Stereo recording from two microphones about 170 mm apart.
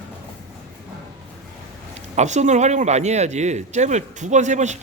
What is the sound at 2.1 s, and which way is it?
Speech, 40° right (ahead or behind).